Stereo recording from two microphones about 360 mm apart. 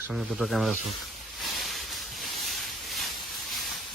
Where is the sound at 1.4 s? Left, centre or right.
Centre.